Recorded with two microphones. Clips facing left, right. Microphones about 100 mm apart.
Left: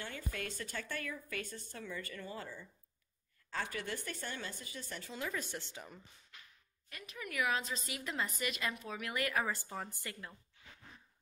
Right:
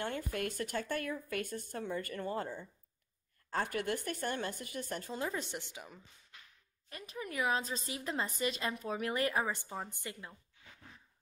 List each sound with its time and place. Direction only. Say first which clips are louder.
0.0 s speech: right 6 dB; 55° right (ahead or behind); by 5.9 s 15° right (ahead or behind)
6.9 s a woman's voice: right 3 dB; 35° right (ahead or behind)